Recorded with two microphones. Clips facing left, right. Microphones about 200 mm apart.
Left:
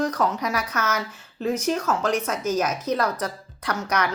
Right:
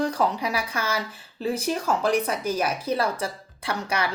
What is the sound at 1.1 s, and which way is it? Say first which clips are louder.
Speech: left 2 dB; 30° right (ahead or behind).